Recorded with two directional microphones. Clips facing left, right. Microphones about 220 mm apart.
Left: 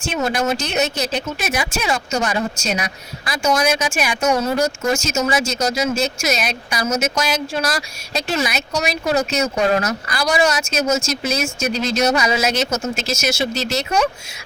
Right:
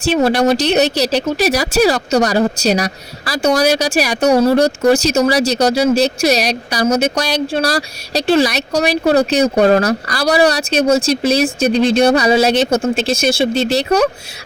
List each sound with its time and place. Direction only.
0.0 s speech: 35° right (ahead or behind)